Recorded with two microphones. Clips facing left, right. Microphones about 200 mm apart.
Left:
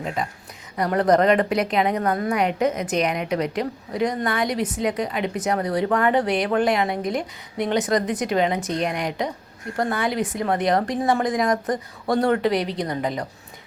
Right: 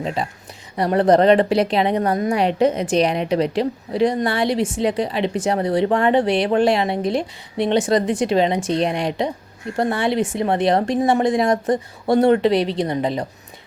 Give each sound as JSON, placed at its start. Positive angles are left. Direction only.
{"t": 0.0, "sound": "a woman's voice", "side_deg": -25}